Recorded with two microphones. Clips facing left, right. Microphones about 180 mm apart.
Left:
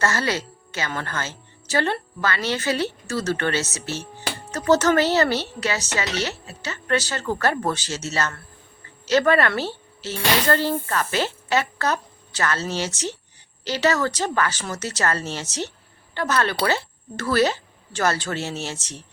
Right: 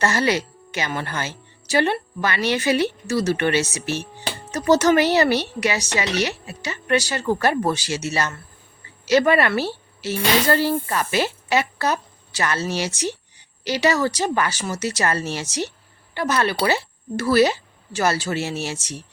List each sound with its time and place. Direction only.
0.0 s a woman's voice: 15° right (ahead or behind)